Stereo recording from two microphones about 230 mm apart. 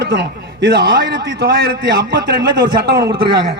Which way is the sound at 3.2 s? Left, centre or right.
Right.